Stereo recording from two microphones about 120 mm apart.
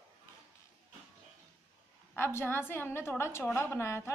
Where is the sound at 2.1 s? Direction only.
20° left (ahead or behind).